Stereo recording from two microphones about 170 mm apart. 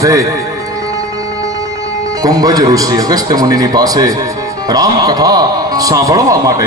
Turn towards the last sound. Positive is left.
turn(degrees=-20)  # may be behind; listen again after turning